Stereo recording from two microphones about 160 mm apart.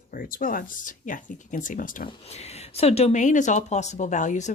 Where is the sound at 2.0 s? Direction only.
40° left (ahead or behind).